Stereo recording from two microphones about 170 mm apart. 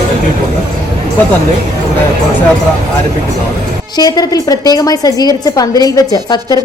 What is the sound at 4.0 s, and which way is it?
A woman's voice, 20° left (ahead or behind).